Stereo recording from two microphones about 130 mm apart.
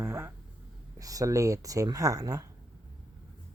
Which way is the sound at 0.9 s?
25° right (ahead or behind).